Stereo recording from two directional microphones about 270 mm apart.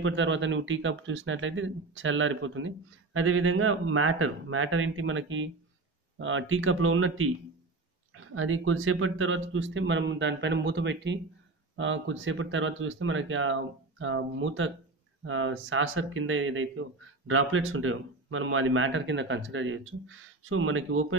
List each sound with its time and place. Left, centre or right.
0.0 s speech: right